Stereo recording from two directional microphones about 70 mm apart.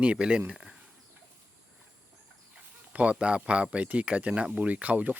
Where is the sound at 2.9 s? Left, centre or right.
Centre.